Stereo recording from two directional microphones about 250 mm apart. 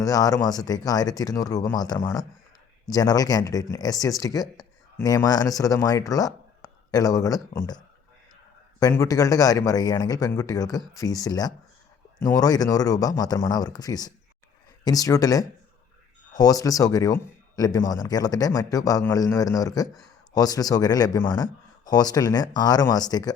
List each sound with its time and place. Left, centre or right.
0.0 s speech: centre
8.8 s speech: centre